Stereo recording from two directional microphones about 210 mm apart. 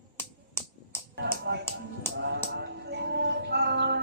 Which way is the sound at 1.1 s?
55° right (ahead or behind).